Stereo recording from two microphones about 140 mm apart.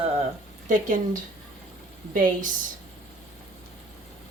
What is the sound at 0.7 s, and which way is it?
Speech, 65° right (ahead or behind).